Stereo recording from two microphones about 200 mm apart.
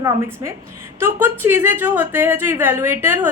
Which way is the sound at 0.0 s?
15° right (ahead or behind).